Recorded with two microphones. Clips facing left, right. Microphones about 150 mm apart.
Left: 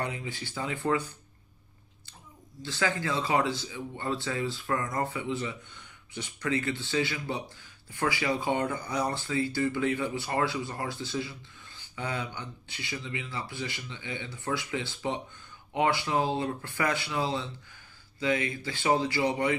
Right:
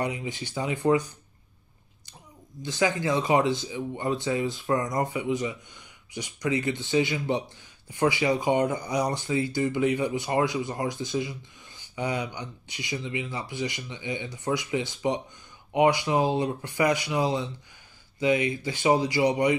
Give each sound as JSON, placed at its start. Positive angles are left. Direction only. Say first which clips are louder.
{"t": 0.0, "sound": "speech", "louder": "right 4 dB", "side_deg": -15}
{"t": 2.6, "sound": "speech", "louder": "right 5 dB", "side_deg": -20}